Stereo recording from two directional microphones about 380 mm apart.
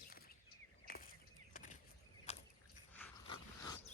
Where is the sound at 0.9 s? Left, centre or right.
Left.